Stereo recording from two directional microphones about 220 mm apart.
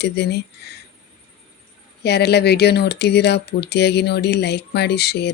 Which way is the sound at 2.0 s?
50° left (ahead or behind).